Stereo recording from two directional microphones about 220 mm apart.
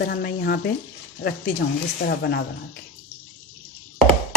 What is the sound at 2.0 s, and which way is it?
Speech, 50° left (ahead or behind).